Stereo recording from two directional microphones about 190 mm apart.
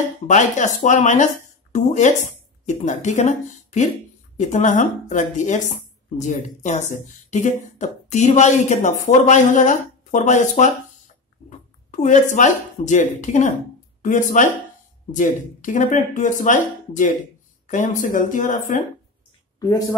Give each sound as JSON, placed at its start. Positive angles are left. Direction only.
{"t": 0.3, "sound": "speech", "side_deg": 40}
{"t": 11.9, "sound": "speech", "side_deg": 40}
{"t": 19.6, "sound": "speech", "side_deg": 20}